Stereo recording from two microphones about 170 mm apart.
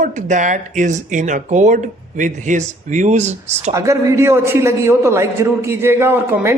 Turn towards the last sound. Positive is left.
turn(degrees=-15)  # may be behind; listen again after turning